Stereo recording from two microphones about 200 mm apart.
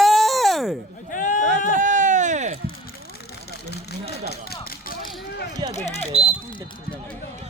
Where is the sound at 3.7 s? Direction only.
55° left (ahead or behind).